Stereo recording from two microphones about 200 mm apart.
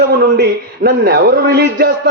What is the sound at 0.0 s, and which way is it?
A man's voice, 50° right (ahead or behind).